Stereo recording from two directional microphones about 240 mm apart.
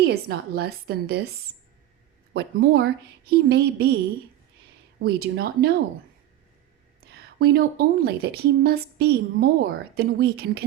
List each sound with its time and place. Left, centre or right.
0.0 s a woman's voice: right
2.3 s a woman's voice: right
5.0 s a woman's voice: right
7.0 s a woman's voice: right